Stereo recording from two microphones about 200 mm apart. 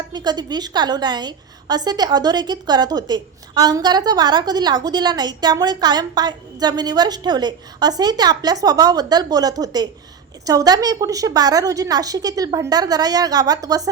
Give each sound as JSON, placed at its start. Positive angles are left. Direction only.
{"t": 0.1, "sound": "a woman's voice", "side_deg": -20}